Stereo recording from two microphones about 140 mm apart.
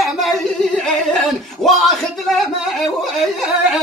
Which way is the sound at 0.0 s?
Centre (ahead or behind).